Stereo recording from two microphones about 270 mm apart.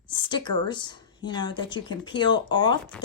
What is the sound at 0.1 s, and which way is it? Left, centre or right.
A woman's voice, centre.